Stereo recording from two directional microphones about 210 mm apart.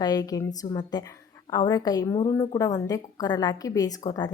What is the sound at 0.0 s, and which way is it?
A woman's voice, 20° left (ahead or behind).